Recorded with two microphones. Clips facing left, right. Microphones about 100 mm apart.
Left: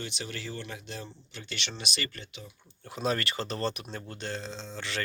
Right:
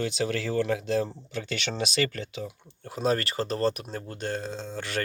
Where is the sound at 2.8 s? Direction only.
40° right (ahead or behind).